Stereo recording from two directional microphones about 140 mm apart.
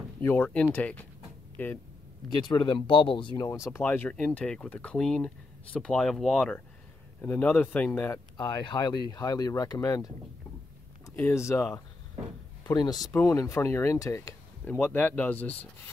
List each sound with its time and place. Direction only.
0.2 s speech: 10° left (ahead or behind)
2.2 s speech: 35° left (ahead or behind)
3.3 s speech: 20° left (ahead or behind)
8.4 s speech: 30° left (ahead or behind); by 15.7 s 10° left (ahead or behind)